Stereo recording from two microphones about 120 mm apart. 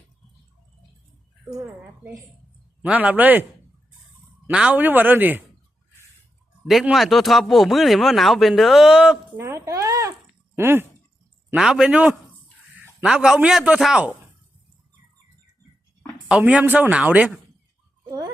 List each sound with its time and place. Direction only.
2.8 s speech: 10° right (ahead or behind)
4.5 s speech: 10° right (ahead or behind)
6.9 s speech: centre (ahead or behind)
9.4 s a sound: 25° right (ahead or behind)
10.5 s speech: 20° right (ahead or behind)
11.5 s speech: 5° right (ahead or behind)
16.3 s speech: 10° right (ahead or behind)